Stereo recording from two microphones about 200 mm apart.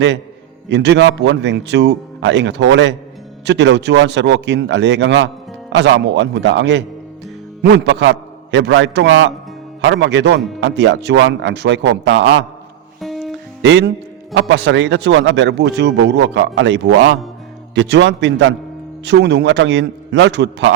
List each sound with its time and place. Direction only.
0.7 s a man's voice: 60° right (ahead or behind)
13.0 s music: centre (ahead or behind)
13.6 s a man's voice: 60° right (ahead or behind)